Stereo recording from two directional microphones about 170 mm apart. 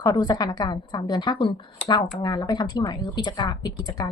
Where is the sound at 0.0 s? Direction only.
20° left (ahead or behind).